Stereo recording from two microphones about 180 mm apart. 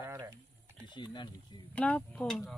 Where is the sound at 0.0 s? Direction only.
15° right (ahead or behind).